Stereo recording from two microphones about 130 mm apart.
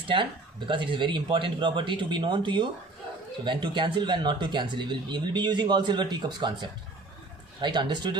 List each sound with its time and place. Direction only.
0.7 s speech: 40° right (ahead or behind)